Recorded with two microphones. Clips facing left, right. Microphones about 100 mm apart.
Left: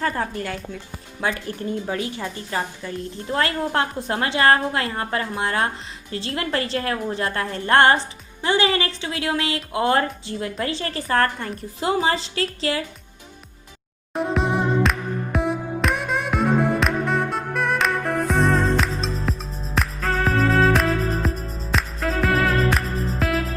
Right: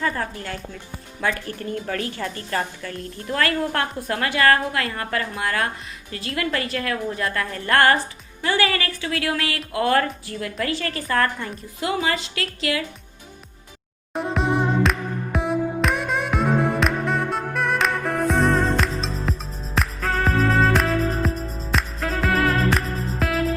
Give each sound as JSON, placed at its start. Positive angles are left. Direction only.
{"t": 0.4, "sound": "speech", "side_deg": 0}
{"t": 1.2, "sound": "a woman's voice", "side_deg": 20}
{"t": 14.1, "sound": "music", "side_deg": 0}